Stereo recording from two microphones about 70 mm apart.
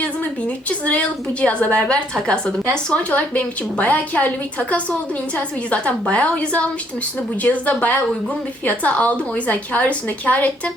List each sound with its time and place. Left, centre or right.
0.9 s a woman's voice: centre
5.7 s a woman's voice: centre